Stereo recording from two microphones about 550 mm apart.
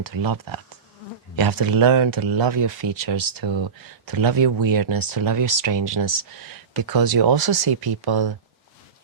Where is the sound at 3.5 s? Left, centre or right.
Right.